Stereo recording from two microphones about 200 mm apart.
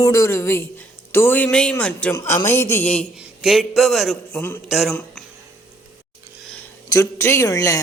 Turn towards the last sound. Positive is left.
turn(degrees=15)  # may be behind; listen again after turning